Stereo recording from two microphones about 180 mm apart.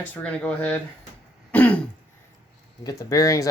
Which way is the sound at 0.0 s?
10° left (ahead or behind).